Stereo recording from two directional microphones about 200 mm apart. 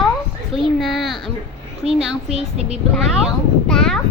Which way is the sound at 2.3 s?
30° right (ahead or behind).